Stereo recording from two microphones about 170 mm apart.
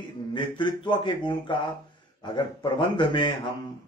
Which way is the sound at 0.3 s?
25° left (ahead or behind).